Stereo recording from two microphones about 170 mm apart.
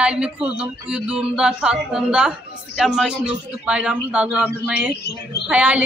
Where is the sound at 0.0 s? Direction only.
5° right (ahead or behind).